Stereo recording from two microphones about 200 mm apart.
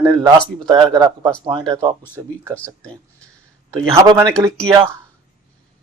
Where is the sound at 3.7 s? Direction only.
15° right (ahead or behind).